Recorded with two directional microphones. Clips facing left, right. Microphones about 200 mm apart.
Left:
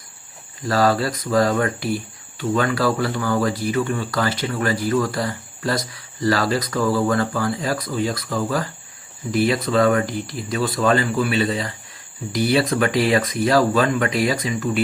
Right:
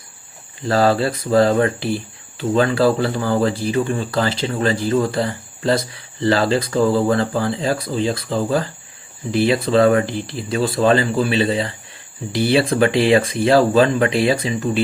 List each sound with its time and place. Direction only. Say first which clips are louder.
0.6 s speech: right 3 dB; 25° right (ahead or behind)